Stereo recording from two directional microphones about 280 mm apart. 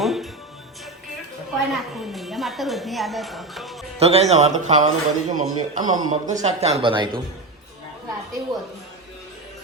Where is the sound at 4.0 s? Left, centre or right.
Right.